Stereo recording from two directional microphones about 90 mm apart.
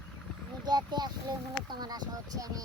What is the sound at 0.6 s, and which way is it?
Speech, 50° right (ahead or behind).